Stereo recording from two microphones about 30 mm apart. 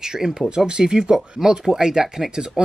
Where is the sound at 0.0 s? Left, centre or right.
Centre.